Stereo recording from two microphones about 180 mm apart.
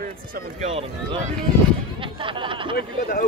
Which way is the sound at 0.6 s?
30° right (ahead or behind).